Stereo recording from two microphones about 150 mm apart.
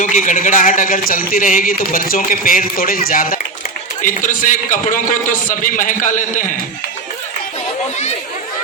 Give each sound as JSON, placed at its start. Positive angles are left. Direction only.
{"t": 0.0, "sound": "a man's voice", "side_deg": 60}